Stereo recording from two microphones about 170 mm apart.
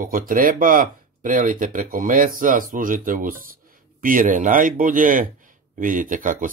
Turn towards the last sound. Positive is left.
turn(degrees=-50)  # may be behind; listen again after turning